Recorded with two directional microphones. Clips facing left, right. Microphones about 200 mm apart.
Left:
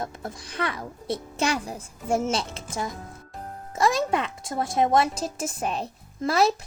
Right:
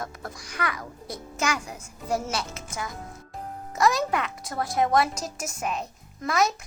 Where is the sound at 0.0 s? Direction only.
25° left (ahead or behind).